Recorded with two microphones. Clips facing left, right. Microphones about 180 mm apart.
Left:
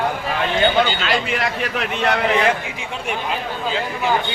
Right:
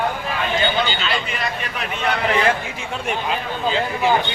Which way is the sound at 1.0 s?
90° left.